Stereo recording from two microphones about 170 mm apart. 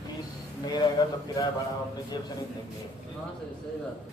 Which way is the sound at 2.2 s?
25° left (ahead or behind).